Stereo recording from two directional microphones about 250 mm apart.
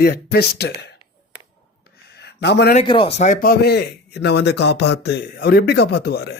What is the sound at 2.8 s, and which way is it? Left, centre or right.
Speech, left.